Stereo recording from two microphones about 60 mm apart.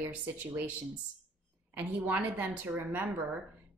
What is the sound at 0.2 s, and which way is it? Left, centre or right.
Speech, right.